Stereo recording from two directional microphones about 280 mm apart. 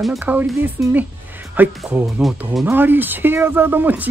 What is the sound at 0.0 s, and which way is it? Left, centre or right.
Speech, centre.